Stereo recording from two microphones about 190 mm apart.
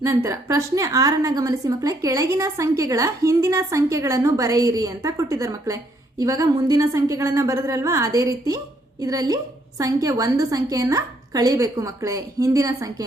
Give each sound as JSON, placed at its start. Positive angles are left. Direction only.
{"t": 0.0, "sound": "a woman's voice", "side_deg": -15}